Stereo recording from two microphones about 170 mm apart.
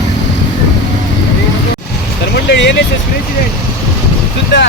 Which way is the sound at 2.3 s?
85° left.